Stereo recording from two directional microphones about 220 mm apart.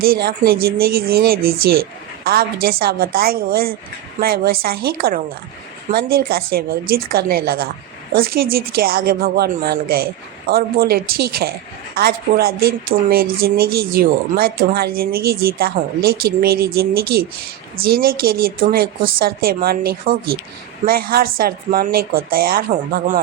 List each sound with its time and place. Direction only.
0.0 s a woman's voice: 45° right (ahead or behind)